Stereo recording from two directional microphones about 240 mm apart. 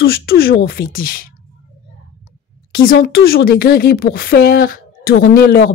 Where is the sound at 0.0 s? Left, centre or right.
Left.